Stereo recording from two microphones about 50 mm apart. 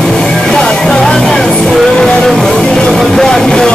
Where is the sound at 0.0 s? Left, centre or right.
Centre.